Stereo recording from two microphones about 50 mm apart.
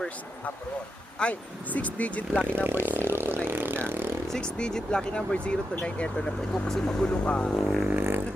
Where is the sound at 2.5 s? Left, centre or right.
Right.